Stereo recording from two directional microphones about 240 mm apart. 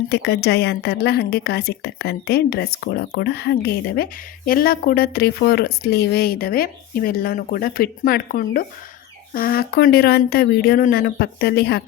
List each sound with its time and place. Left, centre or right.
0.1 s a woman's voice: left